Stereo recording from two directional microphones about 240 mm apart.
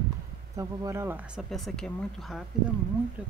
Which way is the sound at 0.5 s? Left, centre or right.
Centre.